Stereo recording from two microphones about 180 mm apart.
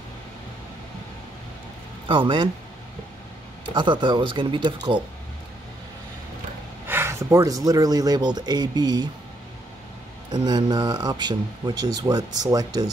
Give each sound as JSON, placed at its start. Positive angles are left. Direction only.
{"t": 2.0, "sound": "speech", "side_deg": -30}
{"t": 3.7, "sound": "speech", "side_deg": -25}
{"t": 6.9, "sound": "speech", "side_deg": -15}
{"t": 10.3, "sound": "speech", "side_deg": -25}